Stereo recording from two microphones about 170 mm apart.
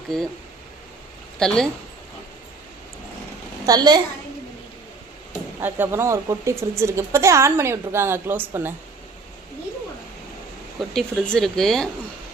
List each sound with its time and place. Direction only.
0.1 s speech: 5° left (ahead or behind)
1.4 s speech: 5° left (ahead or behind)
3.7 s a child's voice: 25° right (ahead or behind)
5.5 s a woman's voice: 10° right (ahead or behind)
10.9 s speech: 5° left (ahead or behind)